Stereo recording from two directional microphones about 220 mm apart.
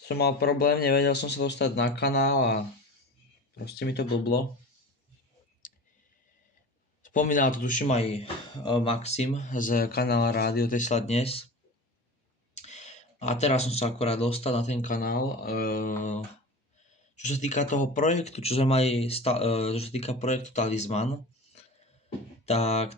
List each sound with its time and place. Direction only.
0.0 s speech: 45° left (ahead or behind)
7.0 s a man's voice: 35° left (ahead or behind)
12.5 s a man's voice: 30° left (ahead or behind)
17.2 s speech: 30° left (ahead or behind)
22.5 s speech: 30° left (ahead or behind)